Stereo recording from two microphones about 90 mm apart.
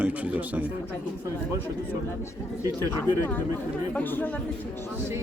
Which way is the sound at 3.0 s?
20° left (ahead or behind).